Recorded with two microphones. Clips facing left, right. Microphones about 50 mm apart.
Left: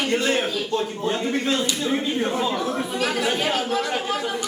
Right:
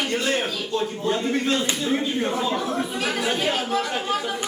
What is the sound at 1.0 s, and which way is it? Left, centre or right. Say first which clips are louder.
Speech: right 2 dB; centre.